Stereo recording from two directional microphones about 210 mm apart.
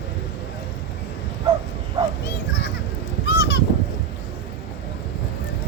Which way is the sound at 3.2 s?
55° left (ahead or behind).